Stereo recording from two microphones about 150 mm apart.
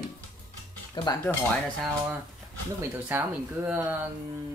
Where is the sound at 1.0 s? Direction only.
30° left (ahead or behind).